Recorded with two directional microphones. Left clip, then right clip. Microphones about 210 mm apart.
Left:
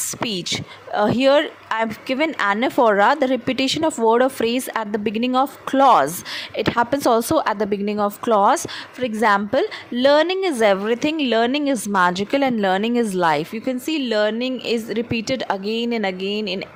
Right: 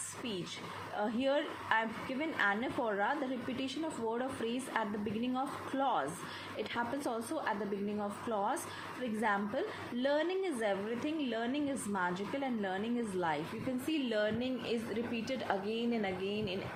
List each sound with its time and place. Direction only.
0.3 s a woman's voice: 50° left (ahead or behind)